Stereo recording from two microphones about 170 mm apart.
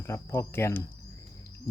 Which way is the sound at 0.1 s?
15° left (ahead or behind).